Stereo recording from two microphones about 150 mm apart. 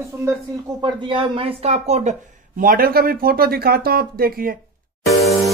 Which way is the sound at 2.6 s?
70° right (ahead or behind).